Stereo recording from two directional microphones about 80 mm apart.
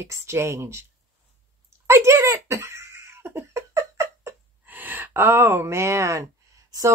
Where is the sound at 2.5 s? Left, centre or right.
Right.